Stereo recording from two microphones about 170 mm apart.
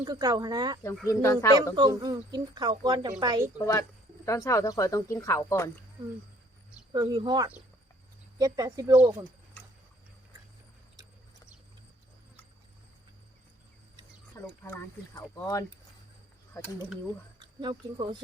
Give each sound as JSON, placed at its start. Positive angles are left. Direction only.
{"t": 0.0, "sound": "speech", "side_deg": -25}
{"t": 1.0, "sound": "speech", "side_deg": 20}
{"t": 1.7, "sound": "speech", "side_deg": -25}
{"t": 3.6, "sound": "speech", "side_deg": 15}
{"t": 6.9, "sound": "speech", "side_deg": -25}
{"t": 14.4, "sound": "a sound", "side_deg": 15}
{"t": 15.1, "sound": "speech", "side_deg": 20}
{"t": 17.4, "sound": "speech", "side_deg": -25}